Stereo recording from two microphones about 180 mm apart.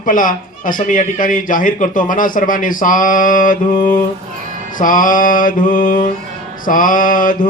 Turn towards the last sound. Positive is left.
turn(degrees=50)  # may be behind; listen again after turning